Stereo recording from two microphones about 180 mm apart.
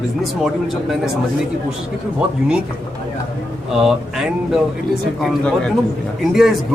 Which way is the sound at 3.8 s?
5° right (ahead or behind).